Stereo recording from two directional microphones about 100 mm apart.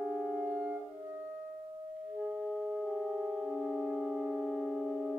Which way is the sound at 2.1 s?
5° right (ahead or behind).